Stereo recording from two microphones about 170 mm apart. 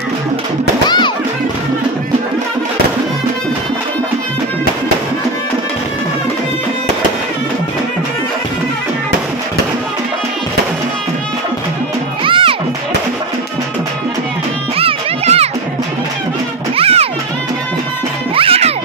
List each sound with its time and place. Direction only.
0.8 s music: 25° left (ahead or behind)
12.3 s music: 30° right (ahead or behind)
14.8 s music: 35° right (ahead or behind)
16.7 s music: 35° right (ahead or behind)
18.3 s music: 35° right (ahead or behind)